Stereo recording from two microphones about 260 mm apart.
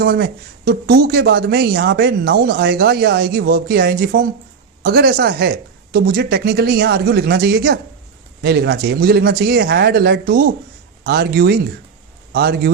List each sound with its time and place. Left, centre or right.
0.0 s speech: right